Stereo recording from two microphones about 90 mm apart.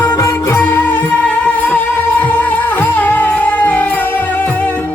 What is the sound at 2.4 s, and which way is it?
Music, 20° left (ahead or behind).